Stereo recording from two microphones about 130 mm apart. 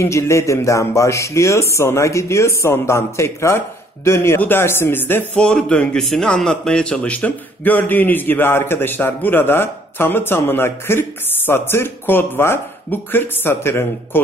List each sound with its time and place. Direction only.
0.0 s speech: 20° left (ahead or behind)